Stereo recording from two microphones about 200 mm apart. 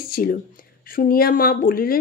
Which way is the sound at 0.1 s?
45° left (ahead or behind).